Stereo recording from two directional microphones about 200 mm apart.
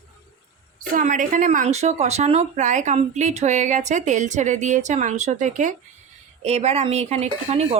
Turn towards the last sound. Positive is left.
turn(degrees=-30)  # may be behind; listen again after turning